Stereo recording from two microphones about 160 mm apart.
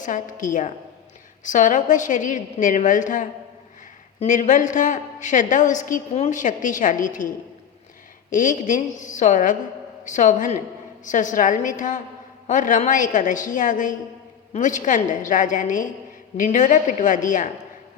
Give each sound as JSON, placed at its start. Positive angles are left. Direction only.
{"t": 0.0, "sound": "a woman's voice", "side_deg": 55}
{"t": 8.3, "sound": "a woman's voice", "side_deg": 55}